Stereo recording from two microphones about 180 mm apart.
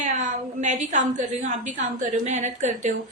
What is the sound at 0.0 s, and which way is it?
A woman's voice, 40° right (ahead or behind).